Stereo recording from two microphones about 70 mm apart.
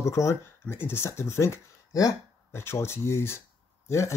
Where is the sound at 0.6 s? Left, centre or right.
Left.